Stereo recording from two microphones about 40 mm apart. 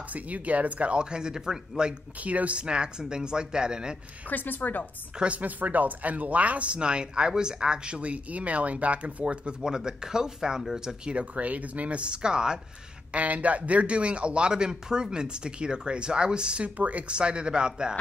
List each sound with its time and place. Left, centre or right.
0.1 s speech: right
1.1 s speech: centre
2.1 s speech: right
2.5 s speech: right
4.3 s a woman's voice: left
5.2 s speech: right
9.6 s speech: centre
11.1 s speech: right
13.1 s speech: right
16.6 s speech: right
17.1 s speech: right